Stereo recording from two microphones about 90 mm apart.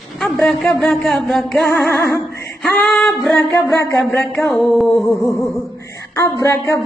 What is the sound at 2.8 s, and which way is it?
Speech, 5° left (ahead or behind).